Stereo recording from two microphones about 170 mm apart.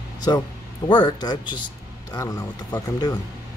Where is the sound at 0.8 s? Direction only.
25° left (ahead or behind).